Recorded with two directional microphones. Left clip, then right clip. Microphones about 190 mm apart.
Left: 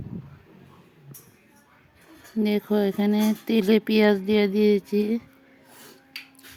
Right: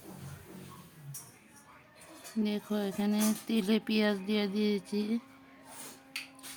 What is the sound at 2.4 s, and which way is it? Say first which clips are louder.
Speech: left 11 dB; 30° left (ahead or behind).